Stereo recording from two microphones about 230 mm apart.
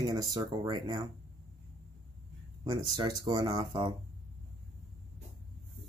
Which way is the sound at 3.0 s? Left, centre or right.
Centre.